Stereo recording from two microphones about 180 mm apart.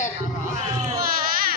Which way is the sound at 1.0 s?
55° right (ahead or behind).